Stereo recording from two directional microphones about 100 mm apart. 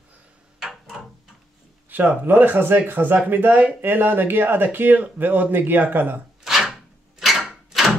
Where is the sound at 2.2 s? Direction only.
20° right (ahead or behind).